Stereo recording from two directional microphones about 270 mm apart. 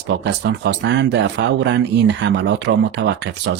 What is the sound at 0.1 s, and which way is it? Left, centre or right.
Speech, right.